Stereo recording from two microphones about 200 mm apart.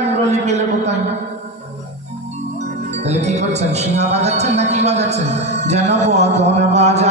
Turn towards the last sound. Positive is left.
turn(degrees=-35)  # may be behind; listen again after turning